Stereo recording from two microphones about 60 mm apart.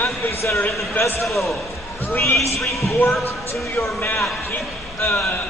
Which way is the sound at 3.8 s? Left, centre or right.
Left.